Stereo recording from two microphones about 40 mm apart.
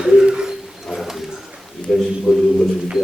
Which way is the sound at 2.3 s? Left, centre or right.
Centre.